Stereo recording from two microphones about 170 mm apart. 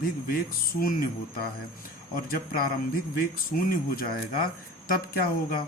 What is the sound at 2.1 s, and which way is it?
Speech, 60° left (ahead or behind).